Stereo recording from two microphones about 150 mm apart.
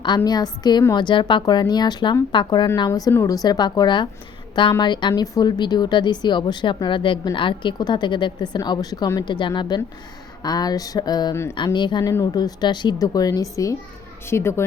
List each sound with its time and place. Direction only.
0.3 s a woman's voice: 25° left (ahead or behind)